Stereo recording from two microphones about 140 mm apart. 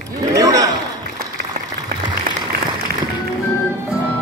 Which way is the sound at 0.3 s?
25° right (ahead or behind).